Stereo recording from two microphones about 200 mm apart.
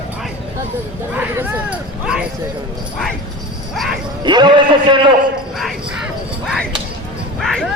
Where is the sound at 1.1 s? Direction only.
5° right (ahead or behind).